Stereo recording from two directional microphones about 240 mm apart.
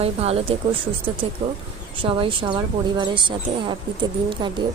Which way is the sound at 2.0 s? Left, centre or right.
Right.